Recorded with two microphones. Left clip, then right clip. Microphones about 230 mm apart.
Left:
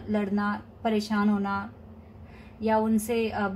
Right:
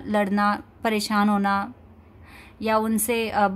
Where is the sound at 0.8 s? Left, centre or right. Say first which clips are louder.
Right 5 dB; right.